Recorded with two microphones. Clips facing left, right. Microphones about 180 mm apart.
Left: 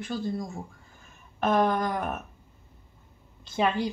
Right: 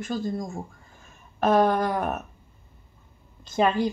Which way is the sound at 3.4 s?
45° right (ahead or behind).